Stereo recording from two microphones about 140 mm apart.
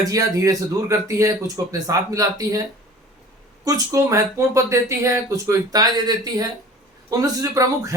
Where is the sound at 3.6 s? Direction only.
25° right (ahead or behind).